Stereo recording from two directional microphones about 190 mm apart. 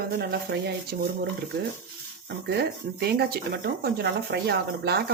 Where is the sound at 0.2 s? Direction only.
55° right (ahead or behind).